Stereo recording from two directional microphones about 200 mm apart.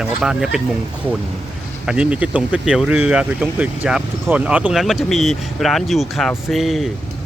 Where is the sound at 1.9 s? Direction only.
5° right (ahead or behind).